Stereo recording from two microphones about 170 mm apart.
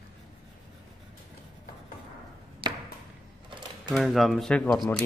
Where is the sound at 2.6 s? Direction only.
30° right (ahead or behind).